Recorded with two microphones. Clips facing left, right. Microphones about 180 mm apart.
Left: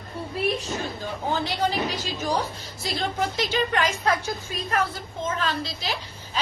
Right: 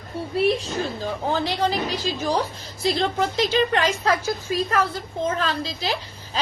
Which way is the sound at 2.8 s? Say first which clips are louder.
Right 5 dB; 35° right (ahead or behind).